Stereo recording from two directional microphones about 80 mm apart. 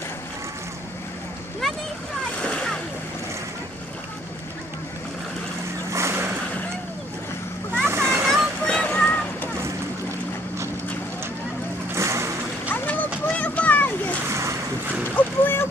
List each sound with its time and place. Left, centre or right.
2.4 s splash: centre
5.9 s a sound: right
7.8 s vehicle: right
8.3 s vehicle: centre
11.9 s vehicle: right
13.3 s splash: centre
14.3 s boat: right
15.1 s boat: left